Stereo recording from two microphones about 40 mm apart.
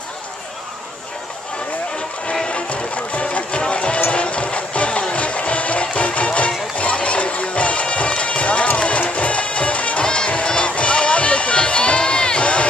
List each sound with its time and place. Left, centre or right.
2.4 s music: left
8.2 s run: left
9.1 s music: left